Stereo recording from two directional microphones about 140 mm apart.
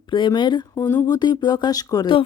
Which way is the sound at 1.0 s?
30° left (ahead or behind).